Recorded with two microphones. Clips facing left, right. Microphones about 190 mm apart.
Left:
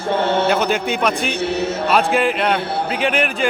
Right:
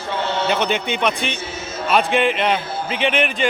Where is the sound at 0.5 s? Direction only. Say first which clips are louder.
Left 2 dB; 5° left (ahead or behind).